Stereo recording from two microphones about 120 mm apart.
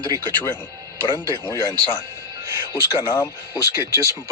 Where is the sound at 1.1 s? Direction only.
35° left (ahead or behind).